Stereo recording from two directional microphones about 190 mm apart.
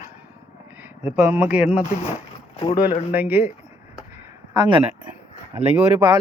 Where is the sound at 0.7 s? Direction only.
10° right (ahead or behind).